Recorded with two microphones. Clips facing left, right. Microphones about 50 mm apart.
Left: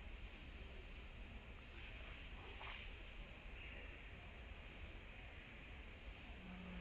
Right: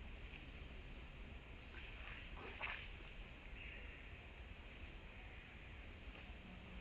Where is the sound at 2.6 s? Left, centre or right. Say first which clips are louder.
Right 7 dB; right.